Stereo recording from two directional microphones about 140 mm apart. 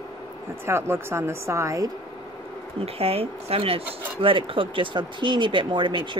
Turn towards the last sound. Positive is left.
turn(degrees=-35)  # may be behind; listen again after turning